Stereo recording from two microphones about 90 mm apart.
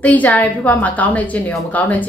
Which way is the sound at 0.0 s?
15° left (ahead or behind).